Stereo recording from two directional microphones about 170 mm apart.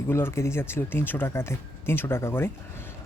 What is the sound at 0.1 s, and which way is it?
Speech, 15° left (ahead or behind).